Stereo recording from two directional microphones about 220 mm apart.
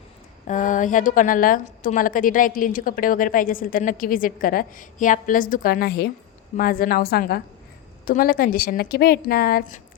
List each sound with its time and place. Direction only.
0.4 s a woman's voice: 35° left (ahead or behind)